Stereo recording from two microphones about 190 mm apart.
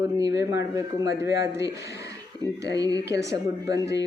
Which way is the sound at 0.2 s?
20° right (ahead or behind).